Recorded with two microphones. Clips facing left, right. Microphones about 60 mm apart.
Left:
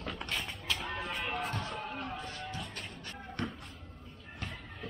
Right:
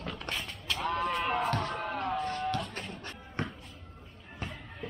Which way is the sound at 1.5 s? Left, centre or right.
Right.